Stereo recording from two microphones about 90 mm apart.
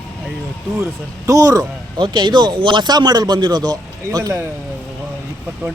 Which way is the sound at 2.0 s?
55° right (ahead or behind).